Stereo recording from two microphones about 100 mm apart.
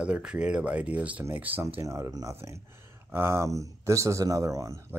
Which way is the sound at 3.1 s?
25° right (ahead or behind).